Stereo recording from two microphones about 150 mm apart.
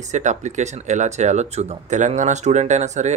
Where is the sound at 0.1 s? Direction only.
55° right (ahead or behind).